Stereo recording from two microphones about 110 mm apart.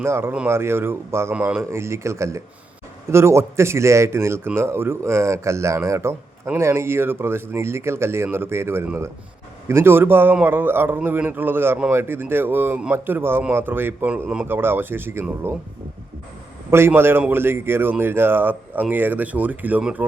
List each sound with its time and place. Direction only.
0.0 s a man's voice: 20° right (ahead or behind)
1.7 s a man's voice: 25° right (ahead or behind); by 14.4 s 10° right (ahead or behind)
14.4 s a man's voice: 20° right (ahead or behind)
16.7 s a man's voice: 20° right (ahead or behind)